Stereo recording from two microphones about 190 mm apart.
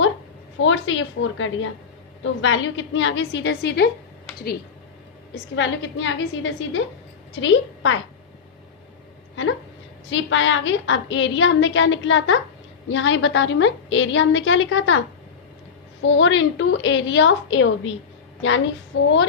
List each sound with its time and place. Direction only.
0.6 s a woman's voice: 90° left; by 3.8 s 60° left (ahead or behind)
5.5 s a woman's voice: 70° left (ahead or behind)
10.1 s a woman's voice: 85° left
16.0 s a woman's voice: 80° left